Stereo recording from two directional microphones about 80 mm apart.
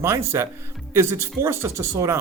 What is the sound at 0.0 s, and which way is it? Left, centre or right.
Speech, right.